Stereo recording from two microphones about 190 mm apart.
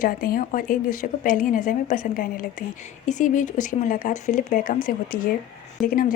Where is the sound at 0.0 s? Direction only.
50° left (ahead or behind).